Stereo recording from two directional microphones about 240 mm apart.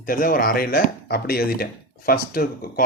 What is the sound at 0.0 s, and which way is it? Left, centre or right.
Speech, left.